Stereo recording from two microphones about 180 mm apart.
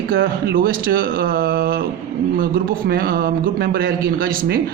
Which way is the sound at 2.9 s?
55° right (ahead or behind).